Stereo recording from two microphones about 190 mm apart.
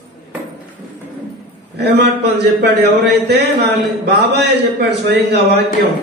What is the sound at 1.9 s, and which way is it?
A man's voice, 60° right (ahead or behind).